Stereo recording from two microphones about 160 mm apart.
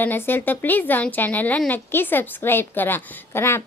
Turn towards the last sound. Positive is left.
turn(degrees=15)  # may be behind; listen again after turning